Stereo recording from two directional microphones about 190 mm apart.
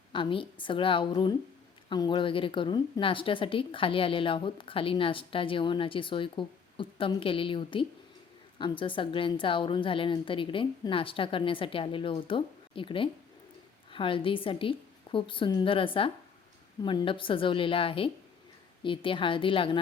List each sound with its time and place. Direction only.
0.1 s a woman's voice: 25° left (ahead or behind)